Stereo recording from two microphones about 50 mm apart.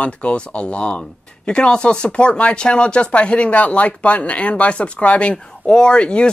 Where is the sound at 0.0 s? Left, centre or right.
Left.